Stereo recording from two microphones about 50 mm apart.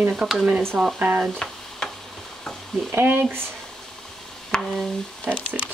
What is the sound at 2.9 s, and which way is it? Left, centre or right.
Speech, right.